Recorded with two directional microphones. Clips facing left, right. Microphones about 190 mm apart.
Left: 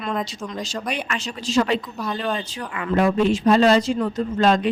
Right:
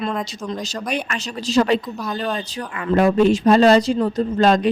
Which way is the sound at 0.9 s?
40° right (ahead or behind).